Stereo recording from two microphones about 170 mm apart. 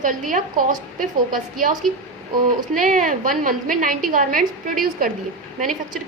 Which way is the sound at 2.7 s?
55° right (ahead or behind).